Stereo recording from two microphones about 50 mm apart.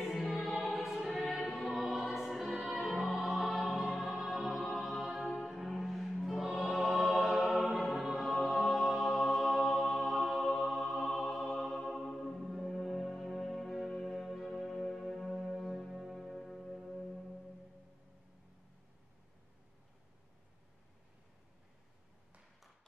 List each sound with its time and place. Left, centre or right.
0.0 s music: centre
6.2 s choir: centre
7.8 s music: centre